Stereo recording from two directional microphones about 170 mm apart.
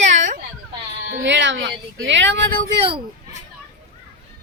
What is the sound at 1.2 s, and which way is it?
Speech, 90° right.